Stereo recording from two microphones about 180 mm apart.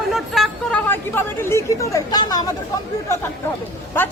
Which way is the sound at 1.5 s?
15° left (ahead or behind).